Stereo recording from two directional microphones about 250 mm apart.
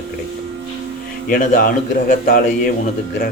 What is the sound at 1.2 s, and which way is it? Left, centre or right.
Speech, left.